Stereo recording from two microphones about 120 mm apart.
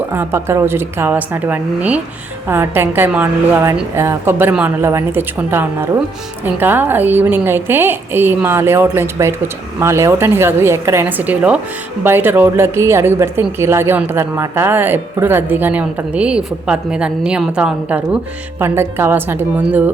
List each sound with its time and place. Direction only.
0.1 s a woman's voice: 20° right (ahead or behind)